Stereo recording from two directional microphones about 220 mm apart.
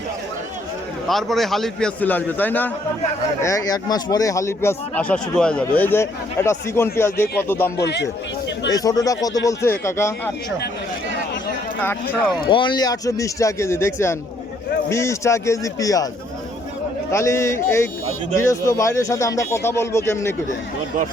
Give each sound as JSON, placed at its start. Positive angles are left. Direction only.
{"t": 1.0, "sound": "a man's voice", "side_deg": 0}
{"t": 8.7, "sound": "a man's voice", "side_deg": 15}
{"t": 12.5, "sound": "a man's voice", "side_deg": 20}
{"t": 17.1, "sound": "a man's voice", "side_deg": 15}